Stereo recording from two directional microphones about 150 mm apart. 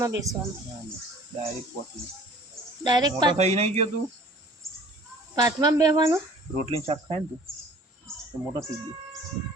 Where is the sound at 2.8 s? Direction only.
30° right (ahead or behind).